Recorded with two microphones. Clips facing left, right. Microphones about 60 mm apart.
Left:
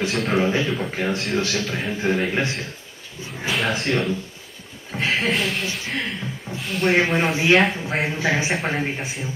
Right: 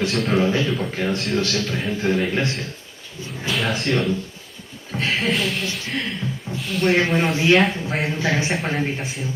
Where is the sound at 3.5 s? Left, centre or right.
Centre.